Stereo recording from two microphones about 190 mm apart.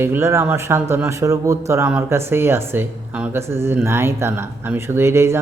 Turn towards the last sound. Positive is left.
turn(degrees=-15)  # may be behind; listen again after turning